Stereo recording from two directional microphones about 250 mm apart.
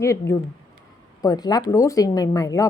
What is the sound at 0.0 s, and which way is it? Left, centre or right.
Speech, centre.